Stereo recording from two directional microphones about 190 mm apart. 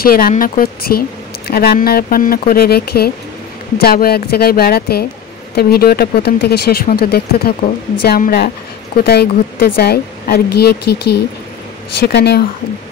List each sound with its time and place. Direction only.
0.0 s a woman's voice: 50° left (ahead or behind)